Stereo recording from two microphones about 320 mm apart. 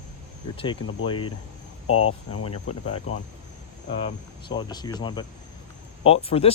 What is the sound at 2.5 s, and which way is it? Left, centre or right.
Speech, centre.